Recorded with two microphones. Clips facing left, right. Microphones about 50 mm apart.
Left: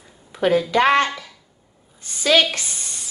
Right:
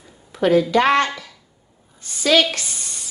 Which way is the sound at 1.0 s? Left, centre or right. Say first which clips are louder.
Even; centre.